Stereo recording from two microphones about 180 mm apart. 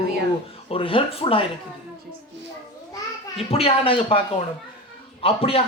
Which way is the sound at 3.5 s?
35° left (ahead or behind).